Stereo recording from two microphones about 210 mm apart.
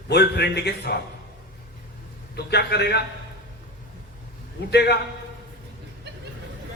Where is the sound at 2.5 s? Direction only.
50° left (ahead or behind).